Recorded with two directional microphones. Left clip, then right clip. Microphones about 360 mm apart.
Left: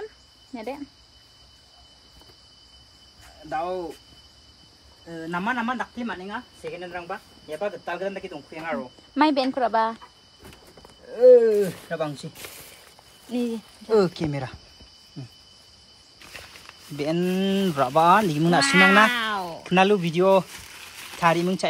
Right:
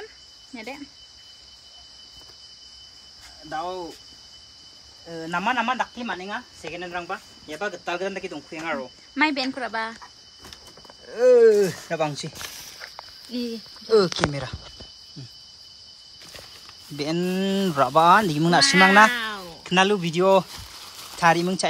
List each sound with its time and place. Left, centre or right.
0.6 s speech: centre
3.4 s speech: centre
5.1 s speech: centre
9.1 s speech: centre
11.1 s speech: right
13.8 s speech: centre
16.9 s speech: centre
18.6 s speech: centre
19.1 s a sound: centre
19.6 s speech: centre